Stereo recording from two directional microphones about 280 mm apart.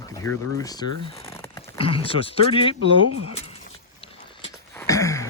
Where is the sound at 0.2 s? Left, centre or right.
Centre.